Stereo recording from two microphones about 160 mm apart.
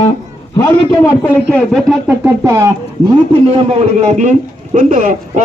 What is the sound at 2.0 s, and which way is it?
Speech, 15° right (ahead or behind).